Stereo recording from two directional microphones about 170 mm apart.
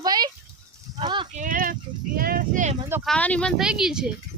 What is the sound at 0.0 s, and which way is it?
Goat, 25° right (ahead or behind).